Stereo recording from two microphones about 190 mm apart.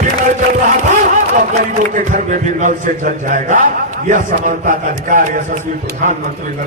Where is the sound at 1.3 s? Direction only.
45° right (ahead or behind).